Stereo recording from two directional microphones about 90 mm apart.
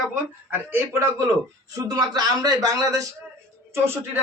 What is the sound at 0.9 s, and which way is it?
Speech, 35° right (ahead or behind).